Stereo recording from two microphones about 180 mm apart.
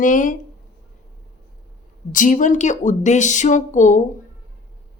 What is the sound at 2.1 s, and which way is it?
Speech, 45° left (ahead or behind).